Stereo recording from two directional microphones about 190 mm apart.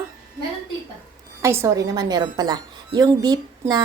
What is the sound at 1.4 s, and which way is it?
A woman's voice, 15° right (ahead or behind).